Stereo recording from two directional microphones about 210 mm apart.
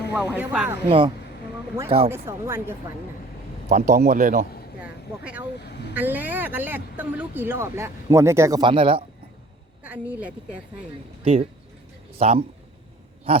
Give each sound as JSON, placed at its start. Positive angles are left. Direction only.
{"t": 0.1, "sound": "speech", "side_deg": -10}
{"t": 0.9, "sound": "speech", "side_deg": -25}
{"t": 2.0, "sound": "speech", "side_deg": -10}
{"t": 3.7, "sound": "speech", "side_deg": -45}
{"t": 4.8, "sound": "vehicle", "side_deg": -5}
{"t": 5.9, "sound": "speech", "side_deg": -10}
{"t": 9.8, "sound": "speech", "side_deg": -5}
{"t": 11.2, "sound": "speech", "side_deg": -25}
{"t": 13.3, "sound": "owl", "side_deg": -25}